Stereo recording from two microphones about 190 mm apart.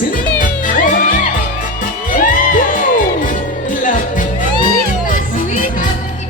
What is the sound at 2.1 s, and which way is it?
Music, 45° left (ahead or behind).